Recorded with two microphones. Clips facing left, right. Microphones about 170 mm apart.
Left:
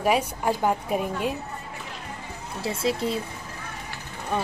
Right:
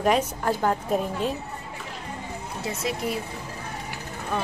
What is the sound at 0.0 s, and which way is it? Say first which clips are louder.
A woman's voice: even; 10° left (ahead or behind).